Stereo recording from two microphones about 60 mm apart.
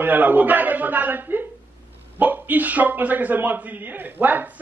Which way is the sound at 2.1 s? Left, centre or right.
Right.